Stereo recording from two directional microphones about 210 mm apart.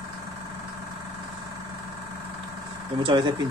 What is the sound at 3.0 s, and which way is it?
Speech, 25° right (ahead or behind).